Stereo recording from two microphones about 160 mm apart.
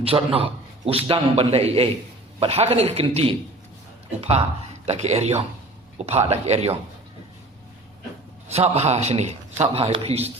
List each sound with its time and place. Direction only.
0.0 s a man's voice: 35° right (ahead or behind)
8.4 s a man's voice: 40° right (ahead or behind)